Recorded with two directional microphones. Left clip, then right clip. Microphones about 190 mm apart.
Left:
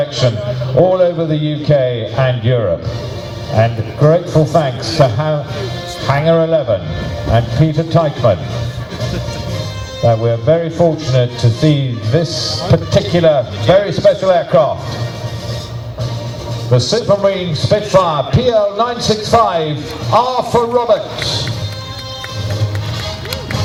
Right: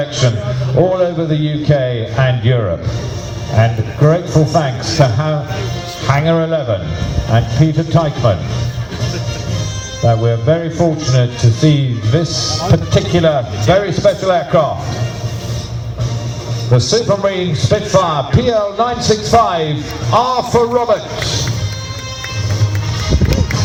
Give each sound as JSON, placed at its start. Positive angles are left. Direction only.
{"t": 0.9, "sound": "a man's voice", "side_deg": 30}
{"t": 10.0, "sound": "a man's voice", "side_deg": 30}
{"t": 16.7, "sound": "a man's voice", "side_deg": 35}